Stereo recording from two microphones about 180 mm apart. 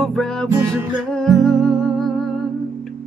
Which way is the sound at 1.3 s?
Centre (ahead or behind).